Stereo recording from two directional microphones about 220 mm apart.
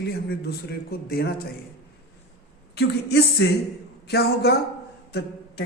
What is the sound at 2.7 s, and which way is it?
A man's voice, 50° left (ahead or behind).